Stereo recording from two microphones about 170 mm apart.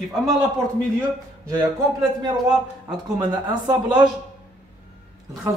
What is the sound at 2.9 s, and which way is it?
A man's voice, 25° right (ahead or behind).